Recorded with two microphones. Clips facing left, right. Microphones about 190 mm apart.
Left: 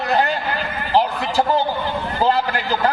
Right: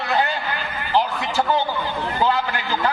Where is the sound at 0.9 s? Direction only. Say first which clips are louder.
Left 3 dB; 35° left (ahead or behind).